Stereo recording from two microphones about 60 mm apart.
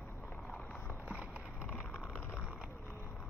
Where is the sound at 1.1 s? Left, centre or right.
Right.